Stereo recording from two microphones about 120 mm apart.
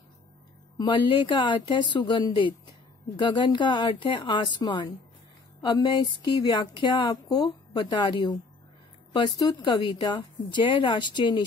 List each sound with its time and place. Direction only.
0.7 s speech: 40° left (ahead or behind)